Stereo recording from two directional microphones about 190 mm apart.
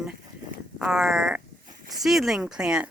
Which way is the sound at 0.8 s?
5° right (ahead or behind).